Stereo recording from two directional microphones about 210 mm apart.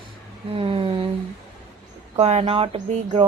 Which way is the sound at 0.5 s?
25° right (ahead or behind).